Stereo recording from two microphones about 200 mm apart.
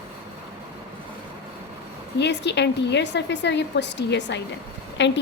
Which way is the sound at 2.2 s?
60° left (ahead or behind).